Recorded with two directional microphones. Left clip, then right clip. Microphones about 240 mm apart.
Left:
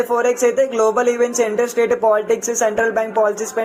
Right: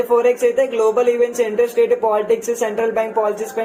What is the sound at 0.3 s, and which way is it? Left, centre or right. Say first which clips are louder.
Speech: even; left.